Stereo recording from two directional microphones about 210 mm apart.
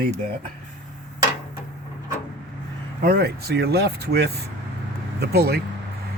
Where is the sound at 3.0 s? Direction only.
45° right (ahead or behind).